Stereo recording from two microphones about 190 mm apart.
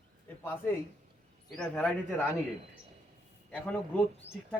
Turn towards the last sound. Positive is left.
turn(degrees=5)  # may be behind; listen again after turning